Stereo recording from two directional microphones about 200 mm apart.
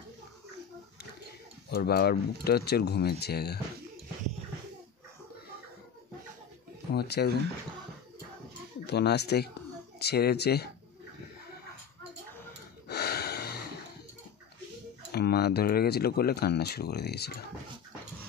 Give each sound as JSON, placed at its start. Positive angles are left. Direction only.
{"t": 1.7, "sound": "speech", "side_deg": 50}
{"t": 6.9, "sound": "speech", "side_deg": 55}
{"t": 8.8, "sound": "speech", "side_deg": 55}
{"t": 12.8, "sound": "gasp", "side_deg": 50}
{"t": 15.1, "sound": "speech", "side_deg": 55}